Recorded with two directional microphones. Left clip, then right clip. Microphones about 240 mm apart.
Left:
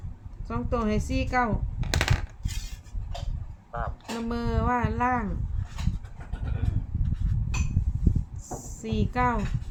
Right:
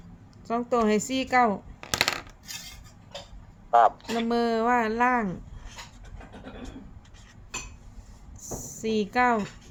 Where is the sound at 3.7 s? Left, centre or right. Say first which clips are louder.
Right 15 dB; right.